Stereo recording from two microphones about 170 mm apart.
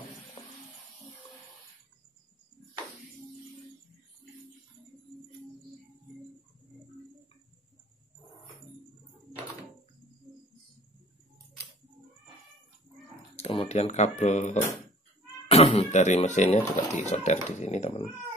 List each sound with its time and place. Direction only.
10.3 s cricket: 5° right (ahead or behind)
13.4 s speech: 35° left (ahead or behind)
15.4 s speech: 35° left (ahead or behind)